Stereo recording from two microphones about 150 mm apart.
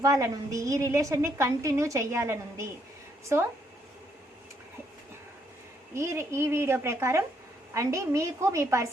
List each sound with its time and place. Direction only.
0.0 s a woman's voice: 20° right (ahead or behind)
5.9 s a woman's voice: 20° right (ahead or behind)